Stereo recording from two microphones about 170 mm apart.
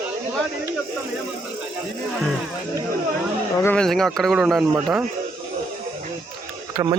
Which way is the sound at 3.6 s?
10° left (ahead or behind).